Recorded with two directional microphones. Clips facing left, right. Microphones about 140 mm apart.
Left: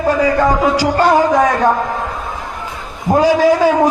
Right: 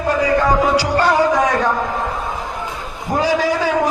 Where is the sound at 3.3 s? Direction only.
45° left (ahead or behind).